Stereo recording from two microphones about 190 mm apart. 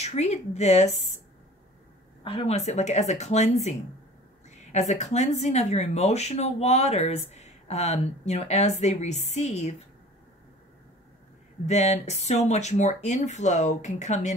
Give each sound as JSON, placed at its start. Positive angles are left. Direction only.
{"t": 0.0, "sound": "speech", "side_deg": 35}
{"t": 2.2, "sound": "speech", "side_deg": 30}
{"t": 4.7, "sound": "speech", "side_deg": 35}
{"t": 11.6, "sound": "speech", "side_deg": 35}